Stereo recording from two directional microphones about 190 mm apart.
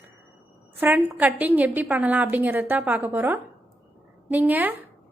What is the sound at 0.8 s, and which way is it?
A woman's voice, 10° right (ahead or behind).